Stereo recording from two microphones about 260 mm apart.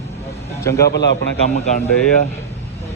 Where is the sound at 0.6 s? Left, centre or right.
Centre.